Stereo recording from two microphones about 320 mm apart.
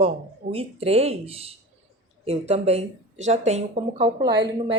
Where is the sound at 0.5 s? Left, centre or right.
Centre.